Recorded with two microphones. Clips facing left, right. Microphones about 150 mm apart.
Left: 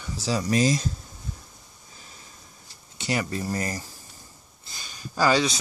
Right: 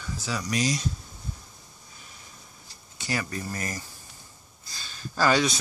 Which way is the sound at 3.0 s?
25° left (ahead or behind).